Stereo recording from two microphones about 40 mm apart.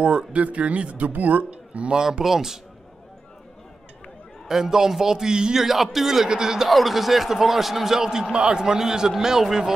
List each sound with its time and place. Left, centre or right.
0.0 s speech: right
2.0 s a man's voice: centre
4.5 s a man's voice: centre
6.7 s a man's voice: centre
8.3 s speech: right
8.5 s a man's voice: centre